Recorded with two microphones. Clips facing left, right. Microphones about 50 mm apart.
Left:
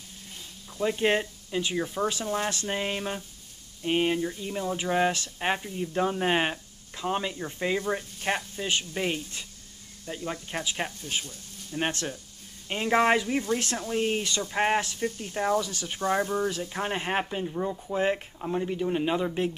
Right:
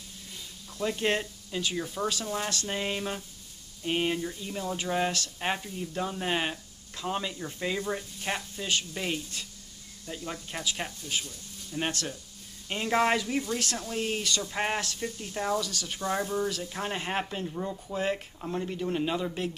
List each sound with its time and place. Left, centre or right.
0.7 s speech: centre